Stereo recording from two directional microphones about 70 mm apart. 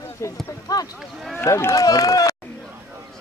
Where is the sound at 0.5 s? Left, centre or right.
Left.